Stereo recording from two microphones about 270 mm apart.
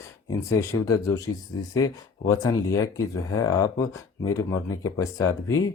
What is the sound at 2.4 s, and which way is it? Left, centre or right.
Speech, centre.